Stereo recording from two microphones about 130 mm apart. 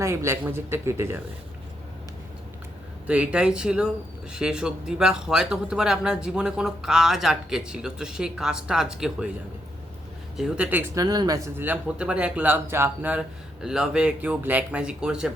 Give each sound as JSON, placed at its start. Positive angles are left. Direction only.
{"t": 0.0, "sound": "speech", "side_deg": -25}
{"t": 3.1, "sound": "a man's voice", "side_deg": -10}
{"t": 10.3, "sound": "speech", "side_deg": -5}